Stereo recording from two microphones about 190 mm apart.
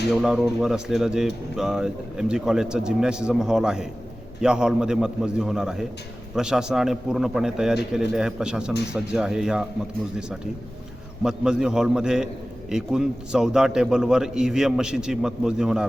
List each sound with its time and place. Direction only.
0.1 s speech: centre (ahead or behind)